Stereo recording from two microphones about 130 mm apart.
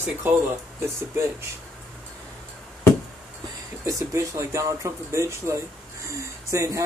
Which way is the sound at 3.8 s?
25° right (ahead or behind).